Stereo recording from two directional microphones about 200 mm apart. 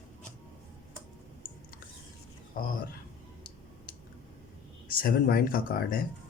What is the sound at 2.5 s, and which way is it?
Speech, 45° left (ahead or behind).